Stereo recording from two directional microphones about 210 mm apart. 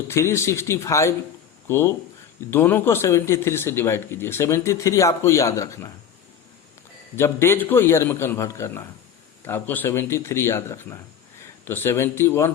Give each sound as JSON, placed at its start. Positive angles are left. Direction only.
{"t": 0.1, "sound": "a man's voice", "side_deg": 10}
{"t": 7.2, "sound": "a man's voice", "side_deg": 10}